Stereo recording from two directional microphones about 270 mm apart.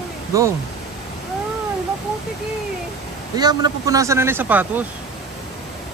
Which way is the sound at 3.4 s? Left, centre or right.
Centre.